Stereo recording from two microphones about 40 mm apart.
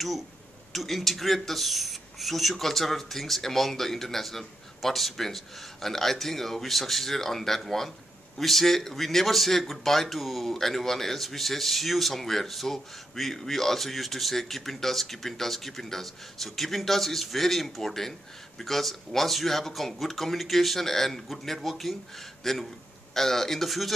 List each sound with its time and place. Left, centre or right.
0.7 s speech: centre